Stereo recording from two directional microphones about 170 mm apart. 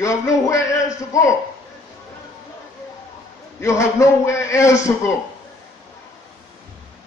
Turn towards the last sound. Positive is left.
turn(degrees=15)  # may be behind; listen again after turning